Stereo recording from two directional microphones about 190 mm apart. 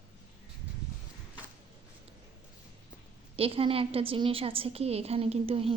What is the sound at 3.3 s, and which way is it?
A woman's voice, 30° right (ahead or behind).